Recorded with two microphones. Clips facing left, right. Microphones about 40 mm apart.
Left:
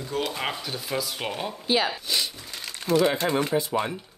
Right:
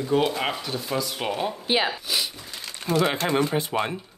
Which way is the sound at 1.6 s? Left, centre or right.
Right.